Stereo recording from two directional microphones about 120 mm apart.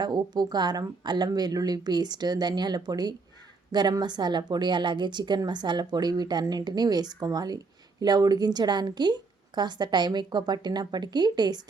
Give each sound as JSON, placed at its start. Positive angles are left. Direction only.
{"t": 0.0, "sound": "a woman's voice", "side_deg": -35}